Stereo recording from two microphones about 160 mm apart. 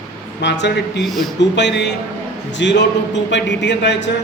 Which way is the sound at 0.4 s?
90° left.